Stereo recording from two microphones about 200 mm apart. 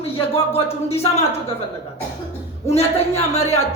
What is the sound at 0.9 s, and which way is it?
Music, 30° left (ahead or behind).